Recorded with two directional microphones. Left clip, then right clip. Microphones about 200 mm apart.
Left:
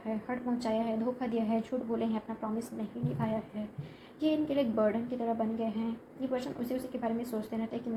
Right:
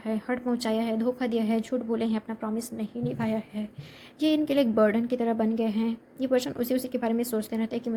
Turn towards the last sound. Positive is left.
turn(degrees=-55)  # may be behind; listen again after turning